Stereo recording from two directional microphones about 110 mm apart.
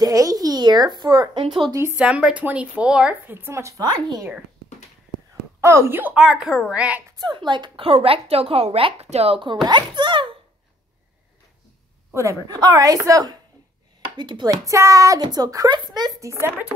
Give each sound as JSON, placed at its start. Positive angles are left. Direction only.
{"t": 0.0, "sound": "a woman's voice", "side_deg": -30}
{"t": 1.7, "sound": "speech", "side_deg": -25}
{"t": 2.0, "sound": "speech", "side_deg": -10}
{"t": 5.6, "sound": "speech", "side_deg": -25}
{"t": 6.1, "sound": "speech", "side_deg": -5}
{"t": 7.1, "sound": "a woman's voice", "side_deg": -40}
{"t": 9.7, "sound": "a child's voice", "side_deg": -45}
{"t": 12.1, "sound": "a woman's voice", "side_deg": -25}
{"t": 14.7, "sound": "a woman's voice", "side_deg": -30}